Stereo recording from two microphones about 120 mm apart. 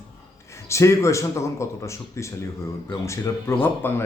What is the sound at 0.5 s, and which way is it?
Speech, 25° left (ahead or behind).